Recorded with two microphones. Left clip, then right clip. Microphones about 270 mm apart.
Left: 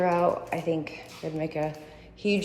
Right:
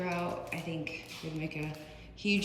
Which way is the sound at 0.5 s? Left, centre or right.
Centre.